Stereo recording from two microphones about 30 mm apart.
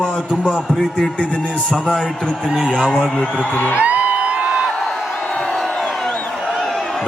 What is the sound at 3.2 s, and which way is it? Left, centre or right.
Speech, left.